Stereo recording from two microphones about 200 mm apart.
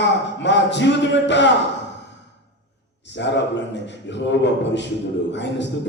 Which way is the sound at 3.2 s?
60° left (ahead or behind).